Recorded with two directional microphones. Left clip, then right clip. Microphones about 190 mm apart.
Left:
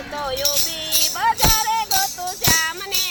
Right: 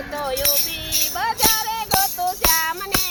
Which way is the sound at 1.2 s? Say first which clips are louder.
Left 2 dB; 25° right (ahead or behind).